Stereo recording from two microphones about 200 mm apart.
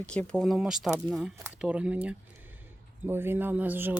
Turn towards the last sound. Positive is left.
turn(degrees=-10)  # may be behind; listen again after turning